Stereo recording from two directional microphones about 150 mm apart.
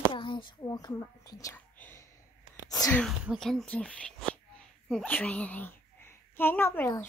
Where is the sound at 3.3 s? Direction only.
Centre (ahead or behind).